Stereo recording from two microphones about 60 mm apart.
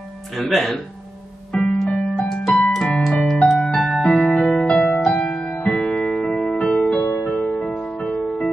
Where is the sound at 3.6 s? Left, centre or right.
Centre.